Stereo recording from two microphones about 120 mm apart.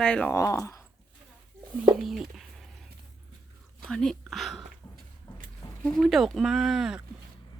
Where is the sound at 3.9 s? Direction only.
5° left (ahead or behind).